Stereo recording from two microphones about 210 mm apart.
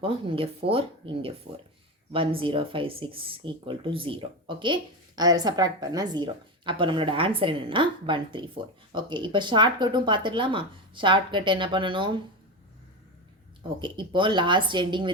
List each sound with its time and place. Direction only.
0.0 s speech: 25° right (ahead or behind)
13.8 s speech: 25° right (ahead or behind)